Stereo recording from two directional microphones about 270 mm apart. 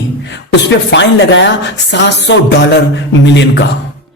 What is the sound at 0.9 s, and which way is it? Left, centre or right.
Speech, left.